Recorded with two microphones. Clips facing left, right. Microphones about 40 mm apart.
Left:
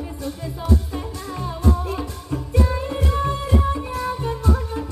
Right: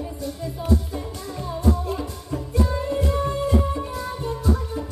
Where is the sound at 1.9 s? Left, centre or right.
Left.